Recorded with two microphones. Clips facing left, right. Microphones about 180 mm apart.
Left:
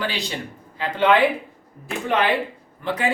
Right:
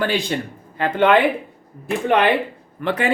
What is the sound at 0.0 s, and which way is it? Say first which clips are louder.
A man's voice: right 6 dB; 50° right (ahead or behind).